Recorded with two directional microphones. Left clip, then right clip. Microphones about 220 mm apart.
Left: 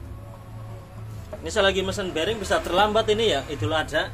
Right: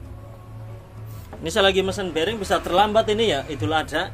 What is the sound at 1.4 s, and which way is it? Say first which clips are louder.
Speech: right 3 dB; 40° right (ahead or behind).